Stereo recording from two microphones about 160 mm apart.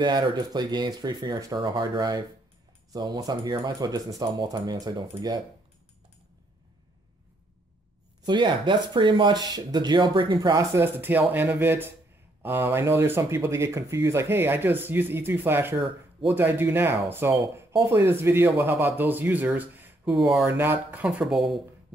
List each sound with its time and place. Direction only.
0.0 s speech: 30° right (ahead or behind)
8.3 s speech: 30° right (ahead or behind); by 20.4 s centre (ahead or behind)
20.4 s speech: 15° right (ahead or behind)